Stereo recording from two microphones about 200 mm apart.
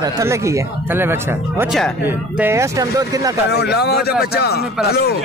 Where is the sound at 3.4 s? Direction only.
55° left (ahead or behind).